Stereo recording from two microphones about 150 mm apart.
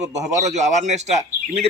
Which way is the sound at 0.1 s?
50° right (ahead or behind).